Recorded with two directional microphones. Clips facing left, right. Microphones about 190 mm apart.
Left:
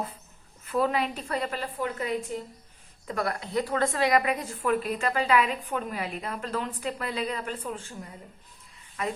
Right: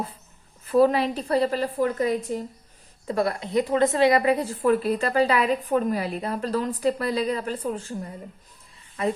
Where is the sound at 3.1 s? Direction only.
25° right (ahead or behind).